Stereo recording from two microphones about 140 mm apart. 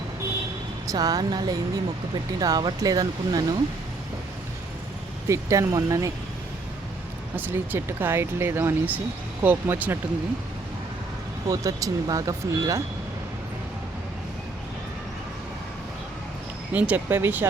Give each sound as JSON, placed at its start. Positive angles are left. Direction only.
{"t": 0.9, "sound": "speech", "side_deg": -25}
{"t": 5.3, "sound": "speech", "side_deg": -25}
{"t": 7.3, "sound": "speech", "side_deg": -15}
{"t": 11.4, "sound": "speech", "side_deg": -25}
{"t": 16.7, "sound": "speech", "side_deg": -10}